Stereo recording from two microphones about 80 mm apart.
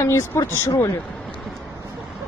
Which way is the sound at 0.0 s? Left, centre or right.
Left.